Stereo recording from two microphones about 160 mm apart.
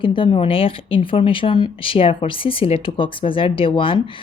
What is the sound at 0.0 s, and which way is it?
Speech, 30° left (ahead or behind).